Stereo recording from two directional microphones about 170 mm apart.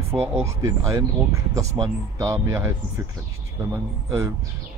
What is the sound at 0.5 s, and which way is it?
Speech, 20° right (ahead or behind).